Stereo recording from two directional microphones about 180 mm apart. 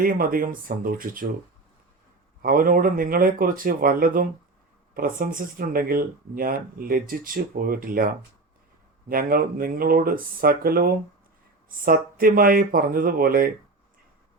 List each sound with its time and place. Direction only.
0.0 s speech: 50° right (ahead or behind)
2.4 s speech: 50° right (ahead or behind)